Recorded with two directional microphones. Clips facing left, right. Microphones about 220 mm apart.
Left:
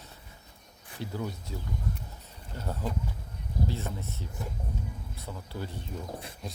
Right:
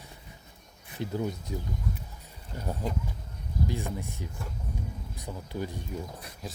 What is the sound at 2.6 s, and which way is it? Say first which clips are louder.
Speech: right 1 dB; 15° right (ahead or behind).